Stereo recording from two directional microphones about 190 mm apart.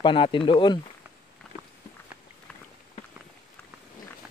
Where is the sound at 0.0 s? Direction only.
25° left (ahead or behind).